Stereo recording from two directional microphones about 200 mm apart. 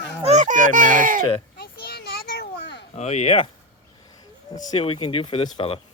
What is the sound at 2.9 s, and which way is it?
Speech, 35° left (ahead or behind).